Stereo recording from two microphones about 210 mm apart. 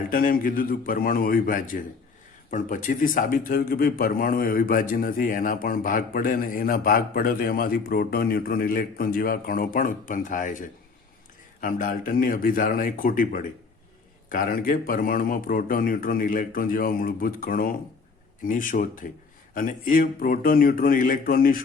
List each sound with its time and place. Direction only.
0.1 s a man's voice: 40° left (ahead or behind)